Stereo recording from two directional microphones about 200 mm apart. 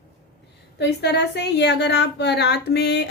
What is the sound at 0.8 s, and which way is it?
A woman's voice, 60° left (ahead or behind).